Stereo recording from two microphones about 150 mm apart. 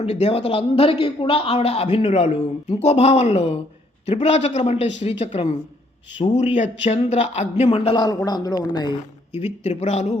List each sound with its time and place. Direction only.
0.0 s a man's voice: 45° left (ahead or behind)
7.9 s a woman's voice: 25° left (ahead or behind)
9.4 s speech: 45° left (ahead or behind)